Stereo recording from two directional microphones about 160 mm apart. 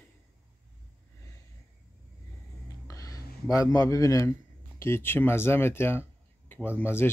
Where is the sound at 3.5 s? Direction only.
20° left (ahead or behind).